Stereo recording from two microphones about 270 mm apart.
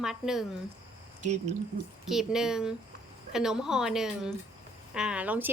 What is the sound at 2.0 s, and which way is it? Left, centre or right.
A woman's voice, centre.